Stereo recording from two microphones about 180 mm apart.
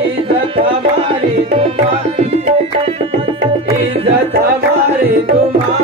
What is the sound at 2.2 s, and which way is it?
Music, 35° right (ahead or behind).